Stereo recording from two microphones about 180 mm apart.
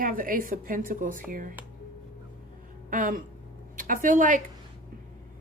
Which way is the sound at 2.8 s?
50° right (ahead or behind).